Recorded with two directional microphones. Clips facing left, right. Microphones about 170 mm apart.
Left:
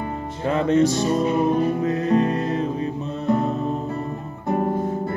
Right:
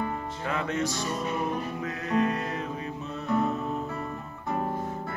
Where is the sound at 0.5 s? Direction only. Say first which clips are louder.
Left 12 dB; 30° left (ahead or behind).